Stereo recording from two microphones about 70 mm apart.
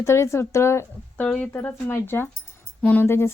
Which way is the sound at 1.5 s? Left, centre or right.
Left.